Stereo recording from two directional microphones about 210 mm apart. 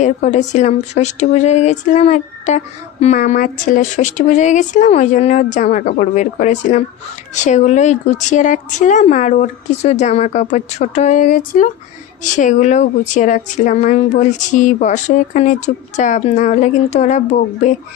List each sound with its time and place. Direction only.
0.0 s speech: 35° left (ahead or behind)